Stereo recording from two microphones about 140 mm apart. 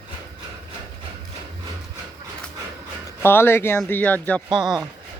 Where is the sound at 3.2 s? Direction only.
15° left (ahead or behind).